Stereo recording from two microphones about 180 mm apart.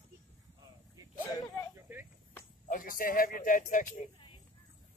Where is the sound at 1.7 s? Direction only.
15° right (ahead or behind).